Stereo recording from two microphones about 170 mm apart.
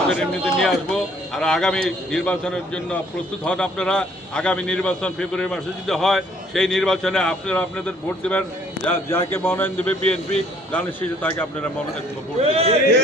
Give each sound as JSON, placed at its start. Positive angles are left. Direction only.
{"t": 0.1, "sound": "a man's voice", "side_deg": 0}
{"t": 12.4, "sound": "a man's voice", "side_deg": -35}